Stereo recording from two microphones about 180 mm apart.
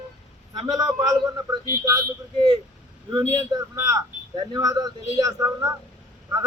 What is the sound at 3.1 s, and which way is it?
Speech, 20° right (ahead or behind).